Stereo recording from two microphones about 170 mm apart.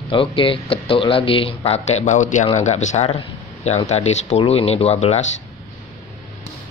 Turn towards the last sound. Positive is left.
turn(degrees=40)  # may be behind; listen again after turning